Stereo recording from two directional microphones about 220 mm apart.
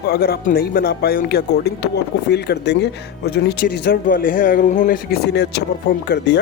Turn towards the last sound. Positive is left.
turn(degrees=50)  # may be behind; listen again after turning